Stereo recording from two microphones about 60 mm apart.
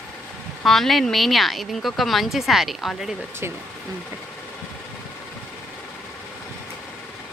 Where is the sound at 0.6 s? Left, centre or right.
Centre.